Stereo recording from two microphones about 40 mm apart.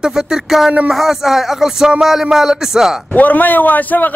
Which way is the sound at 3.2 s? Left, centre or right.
Left.